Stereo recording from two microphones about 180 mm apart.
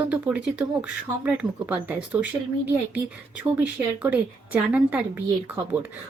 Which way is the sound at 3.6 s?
10° right (ahead or behind).